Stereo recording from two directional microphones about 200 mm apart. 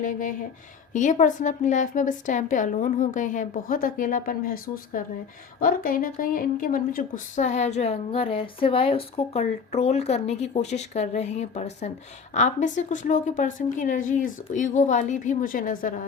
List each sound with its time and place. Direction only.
0.0 s a woman's voice: 40° left (ahead or behind)